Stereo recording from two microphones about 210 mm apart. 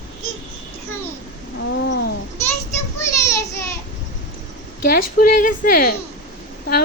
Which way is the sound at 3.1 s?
15° left (ahead or behind).